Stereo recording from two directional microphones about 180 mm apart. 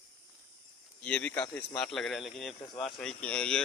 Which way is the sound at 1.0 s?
5° left (ahead or behind).